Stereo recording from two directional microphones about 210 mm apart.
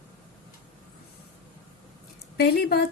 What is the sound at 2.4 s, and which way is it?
Speech, 50° left (ahead or behind).